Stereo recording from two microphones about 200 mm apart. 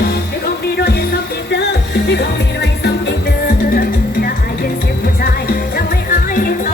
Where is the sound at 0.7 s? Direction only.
50° left (ahead or behind).